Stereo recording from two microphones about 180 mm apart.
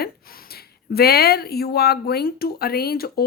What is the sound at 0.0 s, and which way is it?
A woman's voice, 55° left (ahead or behind).